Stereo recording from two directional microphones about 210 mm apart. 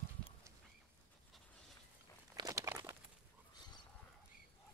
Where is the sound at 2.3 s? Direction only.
15° right (ahead or behind).